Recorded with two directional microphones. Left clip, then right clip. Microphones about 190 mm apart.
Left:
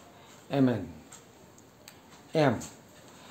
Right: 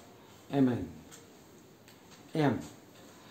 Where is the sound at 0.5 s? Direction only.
55° left (ahead or behind).